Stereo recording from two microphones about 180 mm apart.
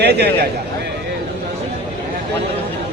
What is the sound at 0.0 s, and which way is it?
Speech, 65° right (ahead or behind).